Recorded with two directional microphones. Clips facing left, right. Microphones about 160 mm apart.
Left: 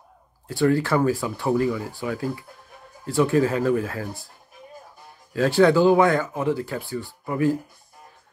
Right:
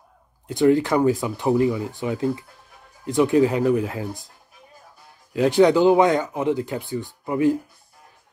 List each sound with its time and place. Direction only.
0.5 s speech: 20° right (ahead or behind)
5.3 s speech: 20° right (ahead or behind)